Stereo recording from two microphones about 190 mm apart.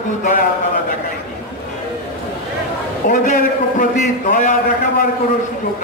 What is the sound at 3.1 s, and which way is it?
A man's voice, 45° left (ahead or behind).